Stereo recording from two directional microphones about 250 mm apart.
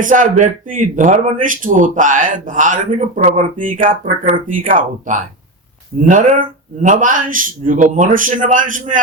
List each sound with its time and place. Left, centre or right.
0.0 s speech: right